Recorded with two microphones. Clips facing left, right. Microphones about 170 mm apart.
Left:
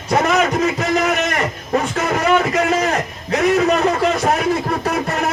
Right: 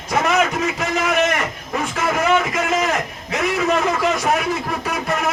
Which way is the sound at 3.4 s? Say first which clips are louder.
Left 4 dB; 35° left (ahead or behind).